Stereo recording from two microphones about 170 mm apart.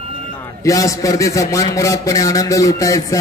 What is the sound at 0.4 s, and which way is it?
A man's voice, 20° left (ahead or behind).